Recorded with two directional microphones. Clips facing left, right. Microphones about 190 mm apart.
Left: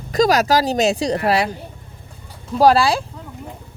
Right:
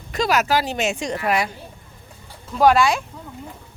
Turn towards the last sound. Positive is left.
turn(degrees=35)  # may be behind; listen again after turning